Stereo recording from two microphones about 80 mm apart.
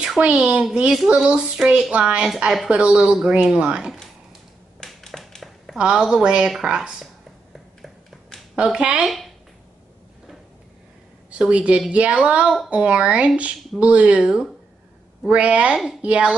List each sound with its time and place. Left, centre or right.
0.2 s a child's voice: centre
4.7 s a sound: centre
5.8 s a child's voice: centre
8.5 s a child's voice: centre
11.2 s a woman's voice: centre